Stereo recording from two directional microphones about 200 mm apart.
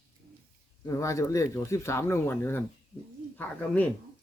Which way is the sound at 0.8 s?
15° left (ahead or behind).